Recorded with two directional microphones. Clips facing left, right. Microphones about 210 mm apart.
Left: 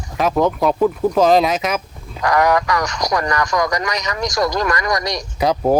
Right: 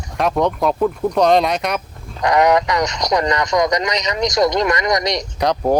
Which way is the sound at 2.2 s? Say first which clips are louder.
Right 2 dB; 20° right (ahead or behind).